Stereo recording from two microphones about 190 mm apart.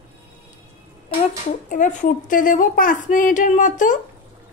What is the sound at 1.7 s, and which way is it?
A woman's voice, 45° left (ahead or behind).